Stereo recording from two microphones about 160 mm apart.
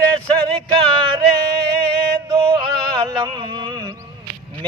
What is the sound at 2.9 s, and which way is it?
Music, 30° right (ahead or behind).